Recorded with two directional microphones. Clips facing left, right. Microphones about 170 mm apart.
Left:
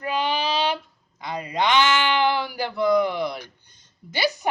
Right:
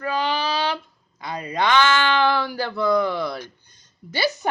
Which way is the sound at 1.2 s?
20° left (ahead or behind).